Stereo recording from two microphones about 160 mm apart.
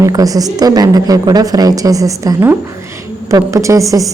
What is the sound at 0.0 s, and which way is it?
A woman's voice, 20° right (ahead or behind).